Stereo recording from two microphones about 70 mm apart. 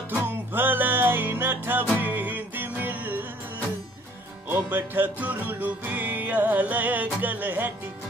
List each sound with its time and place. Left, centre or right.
0.1 s music: right
4.5 s music: right